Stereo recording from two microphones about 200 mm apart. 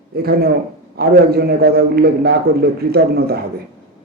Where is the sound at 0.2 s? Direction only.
50° right (ahead or behind).